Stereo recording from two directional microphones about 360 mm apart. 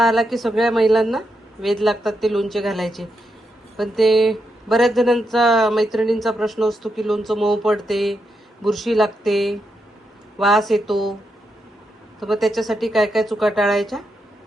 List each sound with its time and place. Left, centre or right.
0.0 s speech: centre
12.2 s speech: centre